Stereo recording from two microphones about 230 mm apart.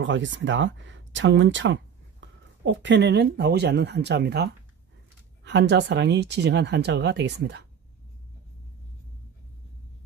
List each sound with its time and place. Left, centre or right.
0.0 s speech: right